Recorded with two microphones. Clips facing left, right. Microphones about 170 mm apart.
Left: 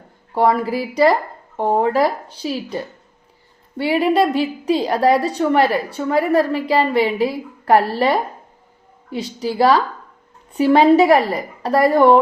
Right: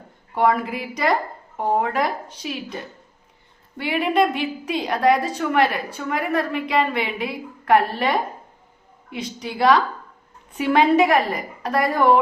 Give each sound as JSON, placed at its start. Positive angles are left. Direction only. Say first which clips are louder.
{"t": 0.3, "sound": "a woman's voice", "louder": "left 3 dB", "side_deg": 30}
{"t": 9.4, "sound": "a woman's voice", "louder": "left 3 dB", "side_deg": 35}